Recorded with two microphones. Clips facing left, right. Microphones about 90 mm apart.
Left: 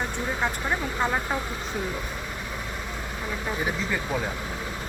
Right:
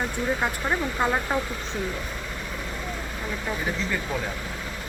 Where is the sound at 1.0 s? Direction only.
5° right (ahead or behind).